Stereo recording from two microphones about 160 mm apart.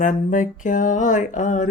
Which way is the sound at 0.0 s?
55° left (ahead or behind).